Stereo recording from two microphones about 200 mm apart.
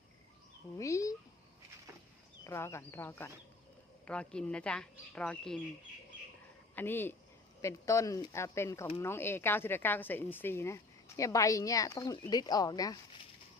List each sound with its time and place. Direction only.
0.8 s speech: 15° left (ahead or behind)
2.4 s speech: 15° left (ahead or behind)
6.7 s speech: 10° left (ahead or behind)